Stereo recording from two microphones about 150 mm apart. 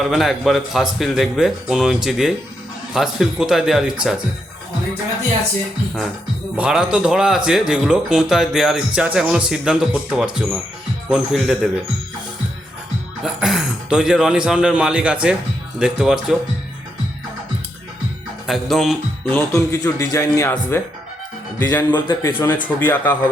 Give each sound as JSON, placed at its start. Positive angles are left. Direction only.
{"t": 0.0, "sound": "a man's voice", "side_deg": 0}
{"t": 6.6, "sound": "a man's voice", "side_deg": -5}
{"t": 13.2, "sound": "a man's voice", "side_deg": -5}
{"t": 18.4, "sound": "speech", "side_deg": 0}
{"t": 19.3, "sound": "a man's voice", "side_deg": 20}